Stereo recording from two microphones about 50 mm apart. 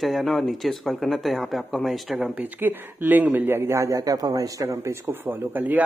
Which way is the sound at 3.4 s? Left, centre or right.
Right.